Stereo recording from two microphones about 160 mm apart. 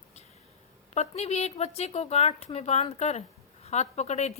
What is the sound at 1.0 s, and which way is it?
A woman's voice, 40° left (ahead or behind).